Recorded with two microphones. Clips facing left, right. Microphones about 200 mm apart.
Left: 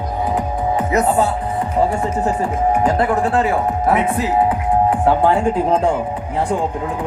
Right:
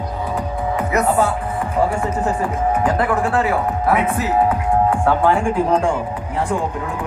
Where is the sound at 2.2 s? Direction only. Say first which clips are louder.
Left 3 dB; 25° left (ahead or behind).